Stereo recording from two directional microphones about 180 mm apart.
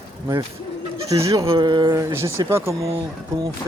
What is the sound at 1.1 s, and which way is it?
Speech, 20° right (ahead or behind).